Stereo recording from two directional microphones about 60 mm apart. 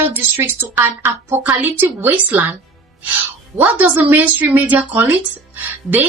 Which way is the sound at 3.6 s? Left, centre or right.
Right.